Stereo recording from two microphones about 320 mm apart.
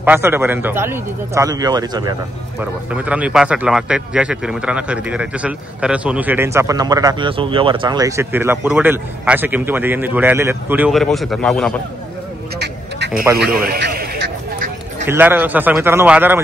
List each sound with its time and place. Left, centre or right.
0.0 s a man's voice: centre
12.5 s duck: right
13.4 s a sound: right
15.0 s a man's voice: centre